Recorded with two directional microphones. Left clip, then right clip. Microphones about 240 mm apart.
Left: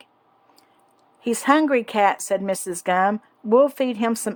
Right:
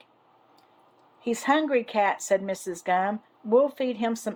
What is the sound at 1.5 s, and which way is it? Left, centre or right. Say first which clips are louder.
Speech: left 5 dB; left.